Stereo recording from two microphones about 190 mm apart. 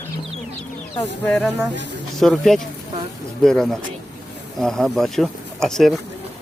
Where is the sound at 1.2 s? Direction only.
5° left (ahead or behind).